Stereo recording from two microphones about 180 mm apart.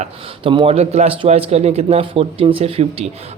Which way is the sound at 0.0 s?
30° right (ahead or behind).